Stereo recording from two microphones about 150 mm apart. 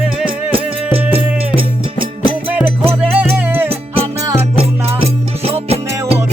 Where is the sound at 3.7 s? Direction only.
40° right (ahead or behind).